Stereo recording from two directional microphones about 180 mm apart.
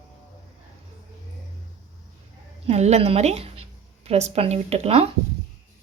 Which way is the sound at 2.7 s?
35° right (ahead or behind).